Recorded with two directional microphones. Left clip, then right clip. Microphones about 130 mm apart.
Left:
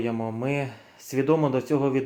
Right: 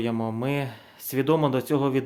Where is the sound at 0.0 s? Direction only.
25° right (ahead or behind).